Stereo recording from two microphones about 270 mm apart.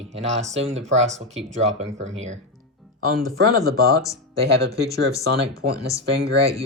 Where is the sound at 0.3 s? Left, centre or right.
Right.